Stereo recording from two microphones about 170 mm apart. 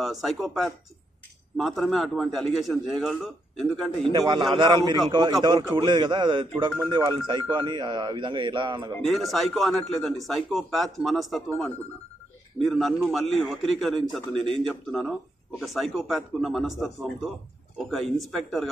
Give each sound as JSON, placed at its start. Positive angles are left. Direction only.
{"t": 0.0, "sound": "a man's voice", "side_deg": 0}
{"t": 4.6, "sound": "speech", "side_deg": -25}
{"t": 9.0, "sound": "a man's voice", "side_deg": 0}
{"t": 12.6, "sound": "a man's voice", "side_deg": 0}